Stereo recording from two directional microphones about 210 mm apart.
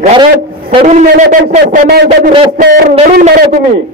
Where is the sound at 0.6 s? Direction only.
35° right (ahead or behind).